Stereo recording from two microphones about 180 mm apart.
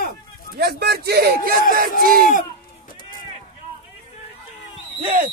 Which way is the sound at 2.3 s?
50° left (ahead or behind).